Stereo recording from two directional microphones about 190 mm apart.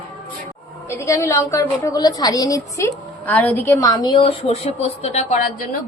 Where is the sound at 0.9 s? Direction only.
15° left (ahead or behind); by 5.4 s 35° left (ahead or behind).